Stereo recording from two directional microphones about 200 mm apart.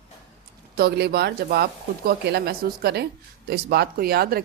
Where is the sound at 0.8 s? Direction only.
55° right (ahead or behind).